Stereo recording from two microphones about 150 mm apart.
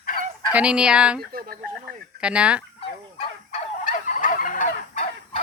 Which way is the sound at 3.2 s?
55° left (ahead or behind).